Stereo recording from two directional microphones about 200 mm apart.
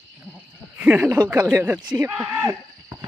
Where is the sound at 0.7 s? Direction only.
5° right (ahead or behind).